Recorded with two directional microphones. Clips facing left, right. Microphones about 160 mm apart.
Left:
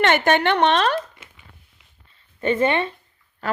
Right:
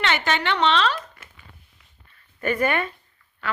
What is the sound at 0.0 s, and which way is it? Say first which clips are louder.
Speech: left 6 dB; 50° left (ahead or behind).